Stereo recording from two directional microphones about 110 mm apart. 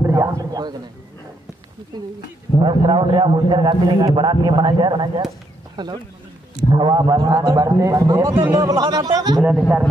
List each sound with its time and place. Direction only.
0.0 s a sound: 25° right (ahead or behind)
1.9 s a man's voice: 40° right (ahead or behind)
9.4 s a man's voice: 15° right (ahead or behind)